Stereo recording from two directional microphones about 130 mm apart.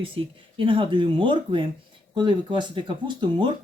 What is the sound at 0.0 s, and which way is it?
Speech, 40° right (ahead or behind).